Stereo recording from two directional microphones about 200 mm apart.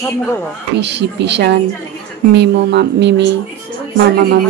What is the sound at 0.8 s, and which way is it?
Speech, 60° right (ahead or behind).